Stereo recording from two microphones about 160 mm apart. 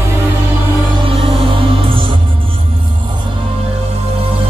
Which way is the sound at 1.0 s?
35° right (ahead or behind).